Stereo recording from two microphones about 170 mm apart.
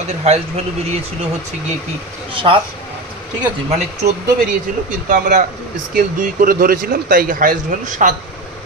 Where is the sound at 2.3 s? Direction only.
30° right (ahead or behind).